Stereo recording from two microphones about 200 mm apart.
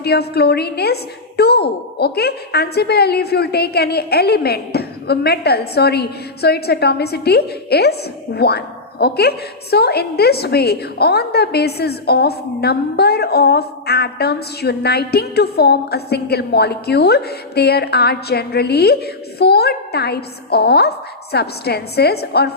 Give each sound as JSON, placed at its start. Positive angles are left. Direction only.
{"t": 0.0, "sound": "a woman's voice", "side_deg": 55}